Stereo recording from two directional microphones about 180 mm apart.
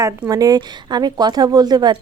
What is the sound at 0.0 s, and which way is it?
Speech, 20° right (ahead or behind).